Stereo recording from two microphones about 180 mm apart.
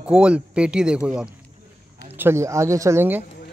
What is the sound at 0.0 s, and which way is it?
Speech, 5° right (ahead or behind).